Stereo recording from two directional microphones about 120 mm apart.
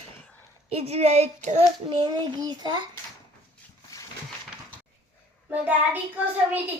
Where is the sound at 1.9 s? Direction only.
40° right (ahead or behind).